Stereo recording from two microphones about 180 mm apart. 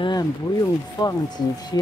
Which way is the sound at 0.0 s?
25° left (ahead or behind).